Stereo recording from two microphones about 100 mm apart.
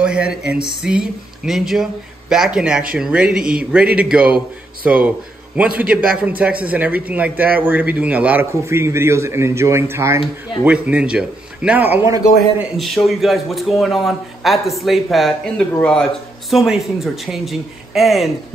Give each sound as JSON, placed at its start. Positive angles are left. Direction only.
{"t": 0.0, "sound": "a sound", "side_deg": -10}
{"t": 0.8, "sound": "speech", "side_deg": -5}
{"t": 8.6, "sound": "speech", "side_deg": -25}
{"t": 10.6, "sound": "speech", "side_deg": -10}
{"t": 12.7, "sound": "speech", "side_deg": 0}